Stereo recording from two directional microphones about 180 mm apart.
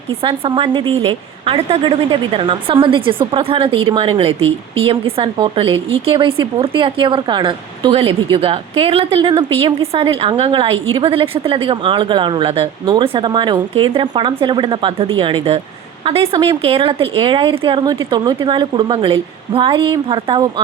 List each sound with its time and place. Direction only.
0.2 s speech: 30° right (ahead or behind)